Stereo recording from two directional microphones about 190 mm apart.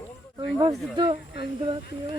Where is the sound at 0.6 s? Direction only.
30° right (ahead or behind).